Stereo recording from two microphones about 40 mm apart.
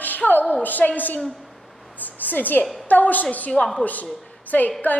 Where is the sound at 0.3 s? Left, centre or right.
Left.